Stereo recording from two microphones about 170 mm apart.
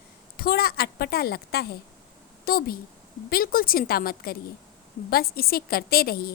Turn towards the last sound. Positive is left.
turn(degrees=65)  # may be behind; listen again after turning